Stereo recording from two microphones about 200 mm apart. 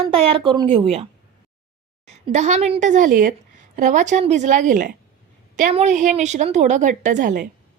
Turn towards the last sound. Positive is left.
turn(degrees=-40)  # may be behind; listen again after turning